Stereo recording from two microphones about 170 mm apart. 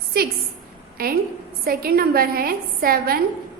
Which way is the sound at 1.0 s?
60° right (ahead or behind).